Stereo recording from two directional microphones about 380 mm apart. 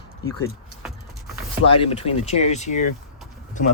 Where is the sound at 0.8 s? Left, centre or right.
Centre.